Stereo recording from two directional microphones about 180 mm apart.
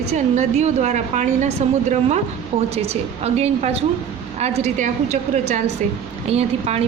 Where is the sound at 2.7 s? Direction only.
35° right (ahead or behind).